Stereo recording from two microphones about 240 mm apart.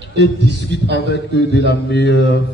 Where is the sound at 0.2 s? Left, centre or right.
Left.